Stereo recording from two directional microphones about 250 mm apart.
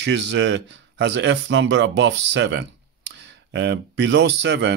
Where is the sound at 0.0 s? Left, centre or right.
Right.